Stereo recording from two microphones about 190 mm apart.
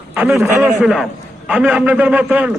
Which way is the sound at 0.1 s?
5° right (ahead or behind).